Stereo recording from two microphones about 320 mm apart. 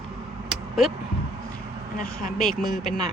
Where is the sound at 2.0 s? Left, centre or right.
Left.